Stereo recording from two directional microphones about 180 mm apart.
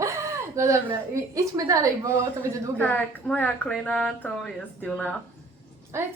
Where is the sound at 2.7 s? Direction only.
10° left (ahead or behind).